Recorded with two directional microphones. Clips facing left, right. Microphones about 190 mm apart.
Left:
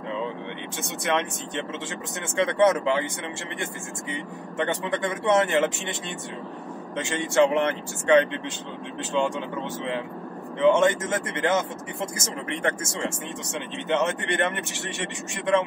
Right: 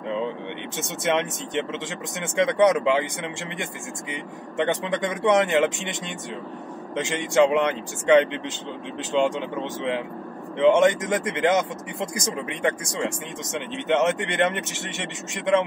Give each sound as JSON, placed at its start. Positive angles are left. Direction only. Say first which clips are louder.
{"t": 0.7, "sound": "speech", "louder": "right 2 dB", "side_deg": -20}
{"t": 4.1, "sound": "a man's voice", "louder": "even", "side_deg": -20}